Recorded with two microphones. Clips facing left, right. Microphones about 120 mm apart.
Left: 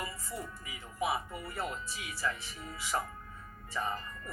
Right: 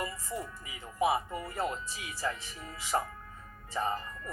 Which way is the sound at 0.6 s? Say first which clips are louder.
Right 6 dB; 25° right (ahead or behind).